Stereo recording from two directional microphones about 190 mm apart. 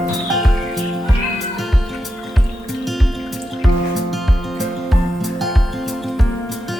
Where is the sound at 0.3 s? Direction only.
Centre (ahead or behind).